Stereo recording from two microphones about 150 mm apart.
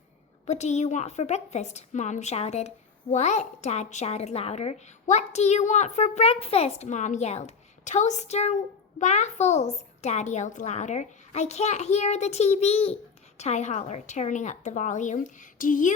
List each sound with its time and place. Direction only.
0.4 s a woman's voice: 50° left (ahead or behind)